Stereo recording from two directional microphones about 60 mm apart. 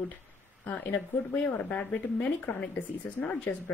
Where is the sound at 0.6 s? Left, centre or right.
Left.